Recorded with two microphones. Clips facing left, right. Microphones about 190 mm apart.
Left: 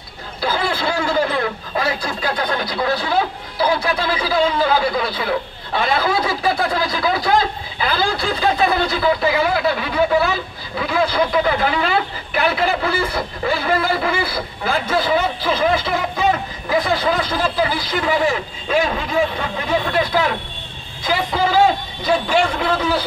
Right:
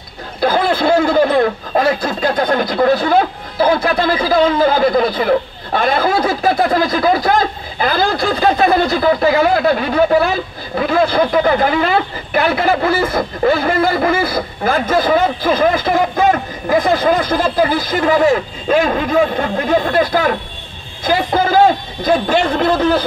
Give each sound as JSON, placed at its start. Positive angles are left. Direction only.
{"t": 0.4, "sound": "a man's voice", "side_deg": -45}